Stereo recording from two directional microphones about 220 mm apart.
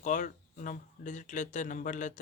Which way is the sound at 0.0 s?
35° left (ahead or behind).